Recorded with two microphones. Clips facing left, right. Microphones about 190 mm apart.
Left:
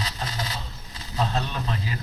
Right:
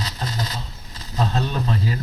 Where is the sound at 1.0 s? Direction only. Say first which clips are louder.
Right 3 dB; 40° right (ahead or behind).